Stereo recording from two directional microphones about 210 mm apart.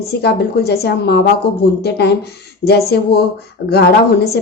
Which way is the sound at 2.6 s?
50° left (ahead or behind).